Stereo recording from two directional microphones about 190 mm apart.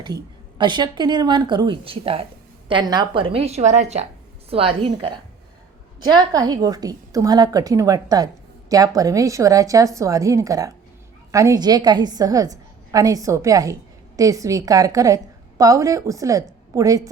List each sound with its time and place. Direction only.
0.6 s a woman's voice: 25° right (ahead or behind)